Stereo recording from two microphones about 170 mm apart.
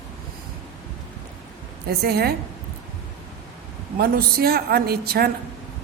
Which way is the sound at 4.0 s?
65° right (ahead or behind).